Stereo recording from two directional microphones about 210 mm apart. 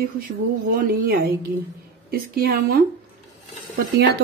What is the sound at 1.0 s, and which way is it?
A woman's voice, 45° right (ahead or behind).